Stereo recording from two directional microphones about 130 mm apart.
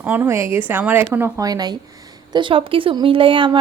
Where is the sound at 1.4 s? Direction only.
30° right (ahead or behind).